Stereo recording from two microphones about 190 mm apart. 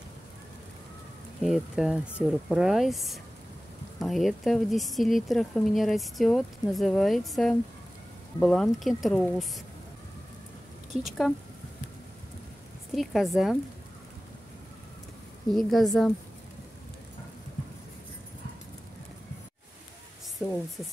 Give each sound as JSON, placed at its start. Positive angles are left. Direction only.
{"t": 1.4, "sound": "speech", "side_deg": 0}
{"t": 10.9, "sound": "speech", "side_deg": -35}
{"t": 12.9, "sound": "speech", "side_deg": 0}
{"t": 15.5, "sound": "speech", "side_deg": 0}
{"t": 20.4, "sound": "speech", "side_deg": 15}